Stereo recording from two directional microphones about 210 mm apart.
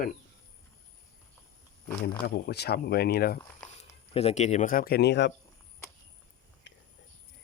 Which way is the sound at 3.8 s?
30° left (ahead or behind).